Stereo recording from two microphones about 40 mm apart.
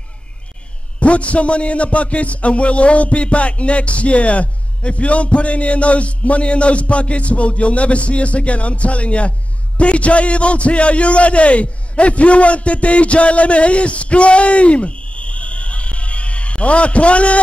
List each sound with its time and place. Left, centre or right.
0.9 s a man's voice: left